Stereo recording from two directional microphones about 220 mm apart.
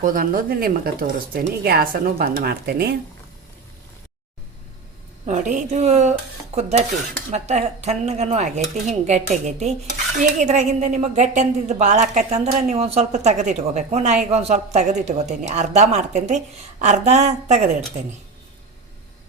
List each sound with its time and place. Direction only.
0.0 s speech: 40° right (ahead or behind)
5.2 s a woman's voice: 35° right (ahead or behind)